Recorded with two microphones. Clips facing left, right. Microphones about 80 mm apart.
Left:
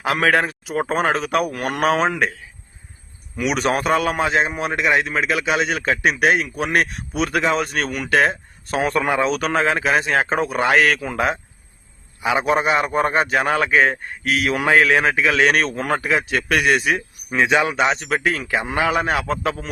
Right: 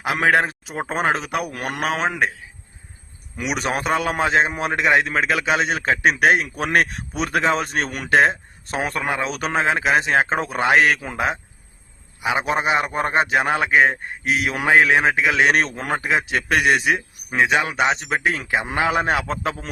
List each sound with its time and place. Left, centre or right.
0.0 s a man's voice: centre
1.8 s a man's voice: centre
3.7 s a man's voice: right
8.8 s a man's voice: centre
9.5 s a man's voice: right
17.3 s a man's voice: centre
17.8 s a man's voice: right